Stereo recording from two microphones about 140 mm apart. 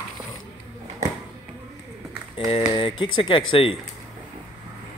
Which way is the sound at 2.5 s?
40° left (ahead or behind).